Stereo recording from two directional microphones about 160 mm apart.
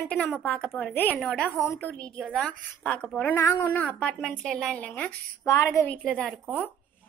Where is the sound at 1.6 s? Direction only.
20° left (ahead or behind).